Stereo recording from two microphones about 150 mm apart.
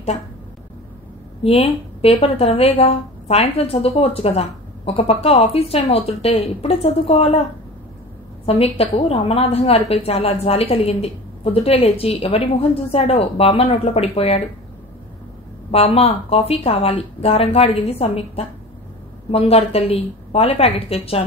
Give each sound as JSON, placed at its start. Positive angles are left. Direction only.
{"t": 1.4, "sound": "speech", "side_deg": 40}
{"t": 8.5, "sound": "speech", "side_deg": 40}
{"t": 15.7, "sound": "speech", "side_deg": 40}